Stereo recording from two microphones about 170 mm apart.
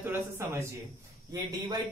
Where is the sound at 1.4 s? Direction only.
25° right (ahead or behind).